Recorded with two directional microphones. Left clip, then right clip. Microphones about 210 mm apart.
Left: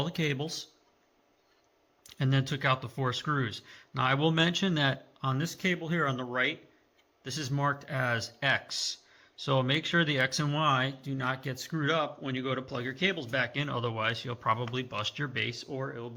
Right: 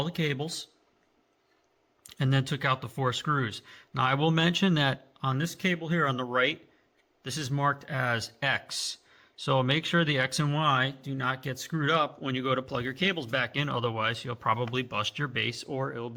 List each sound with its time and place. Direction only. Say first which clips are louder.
0.0 s a man's voice: right 1 dB; 15° right (ahead or behind)
2.0 s speech: right 2 dB; 20° right (ahead or behind); by 16.1 s 35° right (ahead or behind)